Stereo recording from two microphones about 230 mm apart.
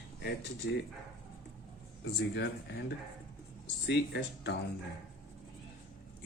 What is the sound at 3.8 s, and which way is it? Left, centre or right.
Speech, left.